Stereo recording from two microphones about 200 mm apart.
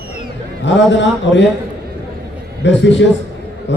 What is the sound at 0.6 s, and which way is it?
Speech, 65° left (ahead or behind).